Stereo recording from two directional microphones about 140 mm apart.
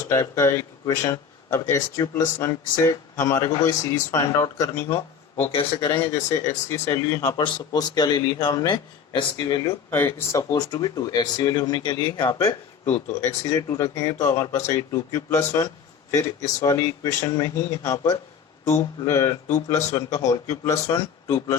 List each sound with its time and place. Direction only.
0.1 s speech: 20° left (ahead or behind)
5.5 s speech: 40° left (ahead or behind)
6.0 s speech: 20° left (ahead or behind)
9.6 s speech: 15° left (ahead or behind); by 12.4 s 35° left (ahead or behind)
12.4 s speech: 15° left (ahead or behind)